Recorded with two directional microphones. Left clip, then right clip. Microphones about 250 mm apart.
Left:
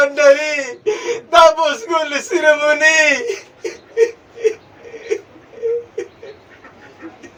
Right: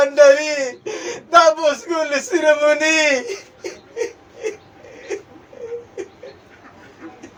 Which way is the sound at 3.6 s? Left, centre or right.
Right.